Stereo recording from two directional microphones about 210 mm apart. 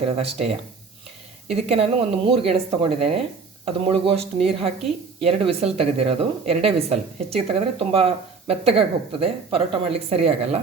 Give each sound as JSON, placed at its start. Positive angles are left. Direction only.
{"t": 0.0, "sound": "a woman's voice", "side_deg": -30}